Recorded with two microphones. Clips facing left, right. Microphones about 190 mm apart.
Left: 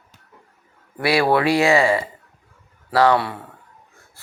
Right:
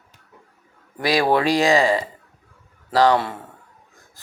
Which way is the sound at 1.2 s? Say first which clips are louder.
Even; 15° right (ahead or behind).